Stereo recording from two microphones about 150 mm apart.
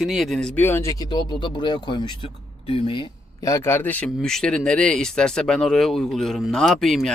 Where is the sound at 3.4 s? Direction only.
20° left (ahead or behind).